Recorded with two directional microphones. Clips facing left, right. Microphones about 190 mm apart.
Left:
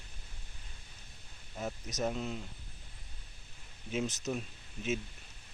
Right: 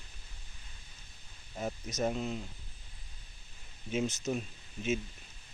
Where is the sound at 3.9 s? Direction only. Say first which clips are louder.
Right 2 dB; centre (ahead or behind).